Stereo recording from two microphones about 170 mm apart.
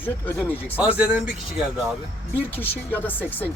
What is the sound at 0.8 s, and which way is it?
Speech, 10° right (ahead or behind).